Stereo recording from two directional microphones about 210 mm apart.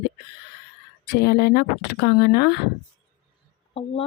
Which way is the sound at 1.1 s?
50° left (ahead or behind).